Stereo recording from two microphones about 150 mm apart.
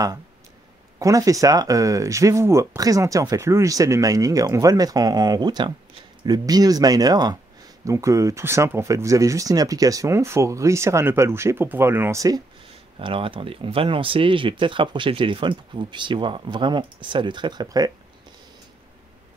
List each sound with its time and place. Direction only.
0.9 s speech: 20° right (ahead or behind)
13.0 s speech: 35° right (ahead or behind)